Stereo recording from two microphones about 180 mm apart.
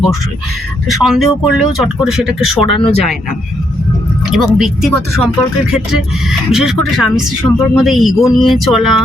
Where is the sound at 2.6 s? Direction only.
30° left (ahead or behind).